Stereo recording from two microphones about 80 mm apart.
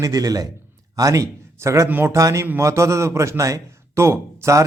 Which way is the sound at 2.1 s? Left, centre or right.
Right.